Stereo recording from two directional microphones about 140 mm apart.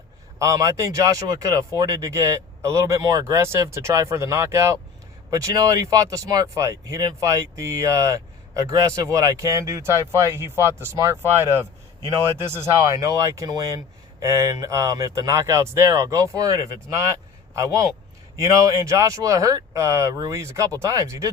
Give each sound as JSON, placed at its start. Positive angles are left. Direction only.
{"t": 0.3, "sound": "speech", "side_deg": -20}